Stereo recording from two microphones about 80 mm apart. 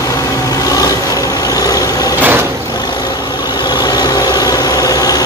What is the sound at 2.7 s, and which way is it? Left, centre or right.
Vehicle, left.